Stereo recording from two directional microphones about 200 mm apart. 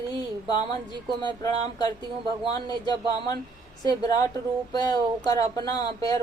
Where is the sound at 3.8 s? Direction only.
20° left (ahead or behind).